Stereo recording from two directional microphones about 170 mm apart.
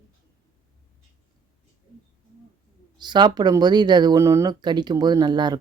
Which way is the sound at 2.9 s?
25° right (ahead or behind).